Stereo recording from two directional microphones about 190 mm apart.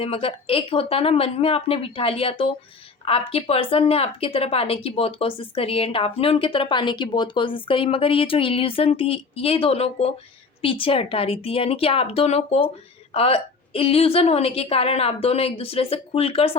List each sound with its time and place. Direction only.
0.0 s a woman's voice: 30° left (ahead or behind)